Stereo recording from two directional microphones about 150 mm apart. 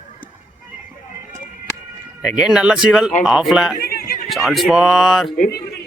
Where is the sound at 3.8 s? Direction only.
80° left.